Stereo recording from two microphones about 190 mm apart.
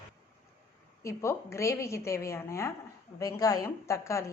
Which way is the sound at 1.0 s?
15° left (ahead or behind).